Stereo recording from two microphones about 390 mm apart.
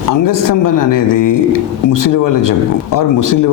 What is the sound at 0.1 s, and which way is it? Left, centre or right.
Speech, left.